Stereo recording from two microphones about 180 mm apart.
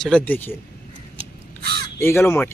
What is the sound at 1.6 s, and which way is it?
Speech, 65° right (ahead or behind).